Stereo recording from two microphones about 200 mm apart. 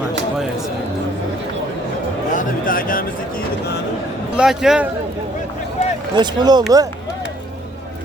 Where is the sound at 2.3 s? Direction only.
45° left (ahead or behind).